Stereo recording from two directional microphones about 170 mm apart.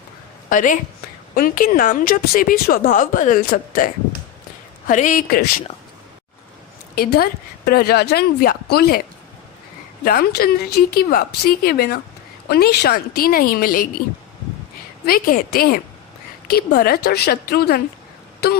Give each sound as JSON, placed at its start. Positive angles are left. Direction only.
{"t": 0.5, "sound": "a woman's voice", "side_deg": 50}
{"t": 4.9, "sound": "speech", "side_deg": 50}
{"t": 6.9, "sound": "a woman's voice", "side_deg": 65}
{"t": 15.0, "sound": "a woman's voice", "side_deg": 60}